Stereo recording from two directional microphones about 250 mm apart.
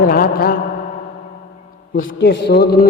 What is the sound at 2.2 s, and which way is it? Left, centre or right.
Music, left.